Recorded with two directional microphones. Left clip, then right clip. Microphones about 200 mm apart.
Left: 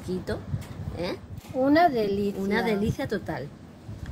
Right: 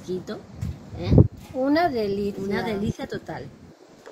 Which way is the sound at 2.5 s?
55° left (ahead or behind).